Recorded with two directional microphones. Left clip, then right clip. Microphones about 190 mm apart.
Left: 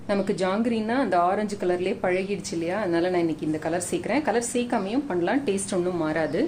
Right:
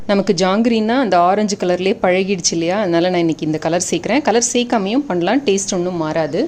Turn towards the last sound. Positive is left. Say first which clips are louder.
# right 7 dB
turn(degrees=-30)  # may be behind; listen again after turning